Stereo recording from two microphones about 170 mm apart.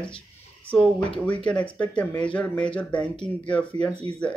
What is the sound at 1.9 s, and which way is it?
Speech, 5° left (ahead or behind).